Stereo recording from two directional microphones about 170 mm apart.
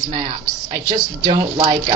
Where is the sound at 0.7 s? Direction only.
25° right (ahead or behind).